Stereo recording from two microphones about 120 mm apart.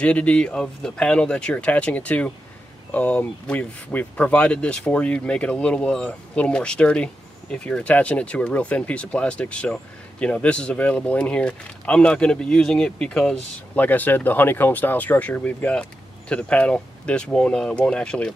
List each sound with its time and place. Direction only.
0.0 s speech: 10° left (ahead or behind)